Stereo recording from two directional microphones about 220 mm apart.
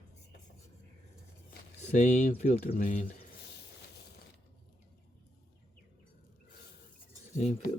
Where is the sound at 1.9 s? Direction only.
35° left (ahead or behind).